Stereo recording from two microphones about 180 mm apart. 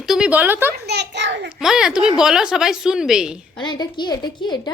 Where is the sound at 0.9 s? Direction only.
70° right (ahead or behind).